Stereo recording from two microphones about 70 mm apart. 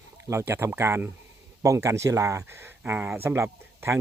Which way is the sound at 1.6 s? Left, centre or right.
Right.